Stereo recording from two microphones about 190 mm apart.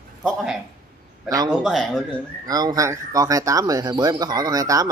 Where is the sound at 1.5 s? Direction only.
Centre (ahead or behind).